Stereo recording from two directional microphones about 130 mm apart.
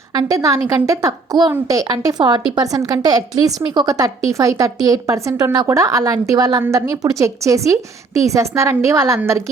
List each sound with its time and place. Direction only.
0.1 s a woman's voice: 30° right (ahead or behind)